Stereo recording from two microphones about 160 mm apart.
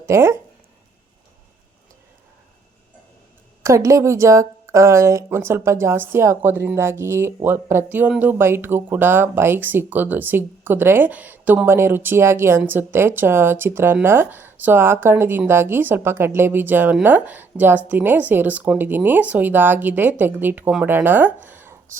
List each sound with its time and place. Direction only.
0.0 s speech: 15° right (ahead or behind)
3.6 s a woman's voice: 20° right (ahead or behind)
21.4 s a sound: 15° right (ahead or behind)